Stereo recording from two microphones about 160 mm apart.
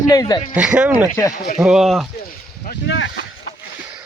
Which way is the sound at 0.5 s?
5° right (ahead or behind).